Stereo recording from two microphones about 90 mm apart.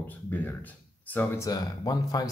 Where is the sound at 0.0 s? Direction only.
20° left (ahead or behind).